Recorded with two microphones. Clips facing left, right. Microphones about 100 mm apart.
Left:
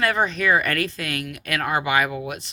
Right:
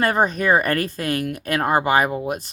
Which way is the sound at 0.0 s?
40° right (ahead or behind).